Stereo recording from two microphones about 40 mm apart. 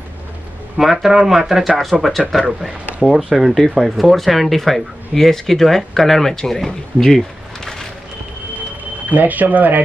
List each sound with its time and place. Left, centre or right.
0.7 s speech: centre
1.9 s speech: centre
9.1 s speech: right